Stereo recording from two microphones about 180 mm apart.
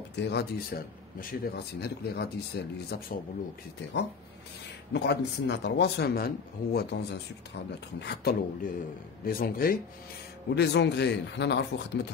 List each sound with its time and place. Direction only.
0.1 s speech: 65° left (ahead or behind)
4.9 s speech: 70° left (ahead or behind); by 9.8 s 55° left (ahead or behind)
10.5 s speech: 70° left (ahead or behind)